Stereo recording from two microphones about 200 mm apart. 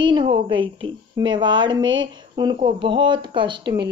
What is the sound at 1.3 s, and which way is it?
Speech, 25° right (ahead or behind).